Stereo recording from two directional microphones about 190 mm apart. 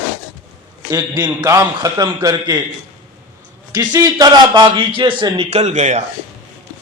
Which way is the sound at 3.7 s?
20° right (ahead or behind).